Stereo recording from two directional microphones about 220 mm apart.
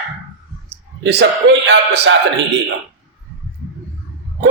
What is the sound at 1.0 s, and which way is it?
A man's voice, 50° right (ahead or behind).